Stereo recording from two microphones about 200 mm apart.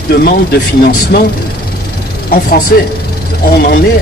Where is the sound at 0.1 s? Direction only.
50° left (ahead or behind).